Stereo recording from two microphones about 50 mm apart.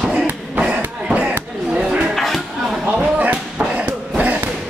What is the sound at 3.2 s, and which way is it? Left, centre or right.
Basketball bounce, right.